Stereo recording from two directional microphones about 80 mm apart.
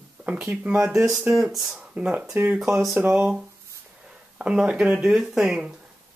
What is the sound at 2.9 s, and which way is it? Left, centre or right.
Speech, right.